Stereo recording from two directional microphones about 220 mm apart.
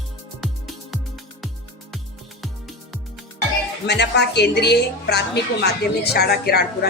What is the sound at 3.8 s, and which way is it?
A woman's voice, 50° left (ahead or behind).